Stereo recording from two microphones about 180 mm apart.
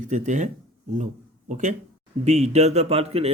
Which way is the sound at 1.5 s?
40° right (ahead or behind).